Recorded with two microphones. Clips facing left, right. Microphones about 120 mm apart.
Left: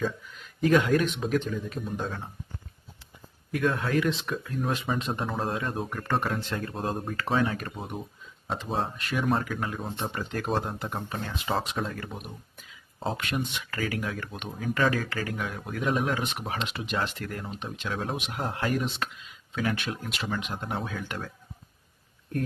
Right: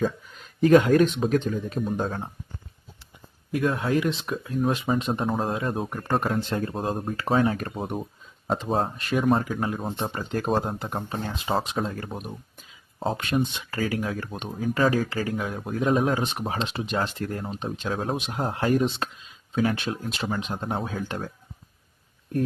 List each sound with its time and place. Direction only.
0.6 s speech: 35° right (ahead or behind)
3.5 s speech: 25° right (ahead or behind)
5.3 s speech: 35° right (ahead or behind)